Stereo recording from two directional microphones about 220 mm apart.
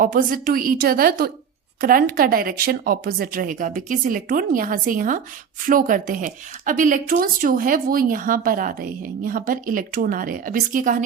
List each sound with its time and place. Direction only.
0.0 s speech: 40° right (ahead or behind)